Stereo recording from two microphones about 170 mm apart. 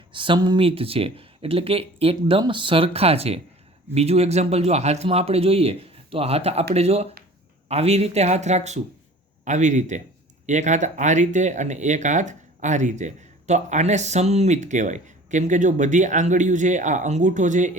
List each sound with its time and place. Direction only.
0.1 s speech: 30° right (ahead or behind); by 17.7 s 45° right (ahead or behind)